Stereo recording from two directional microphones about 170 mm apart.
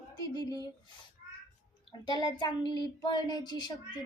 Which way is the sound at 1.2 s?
60° left (ahead or behind).